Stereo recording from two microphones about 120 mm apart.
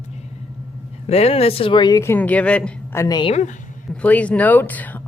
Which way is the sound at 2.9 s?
30° left (ahead or behind).